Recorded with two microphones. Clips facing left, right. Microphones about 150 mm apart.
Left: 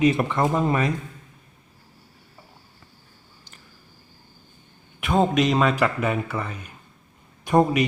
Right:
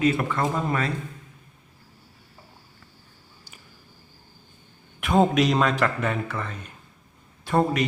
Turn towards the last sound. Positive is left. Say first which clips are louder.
# left 3 dB
turn(degrees=15)  # may be behind; listen again after turning